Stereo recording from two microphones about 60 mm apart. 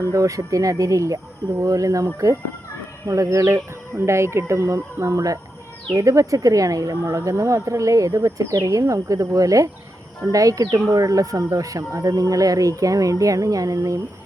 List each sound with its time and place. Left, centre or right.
0.1 s speech: right
3.1 s speech: right
12.1 s speech: right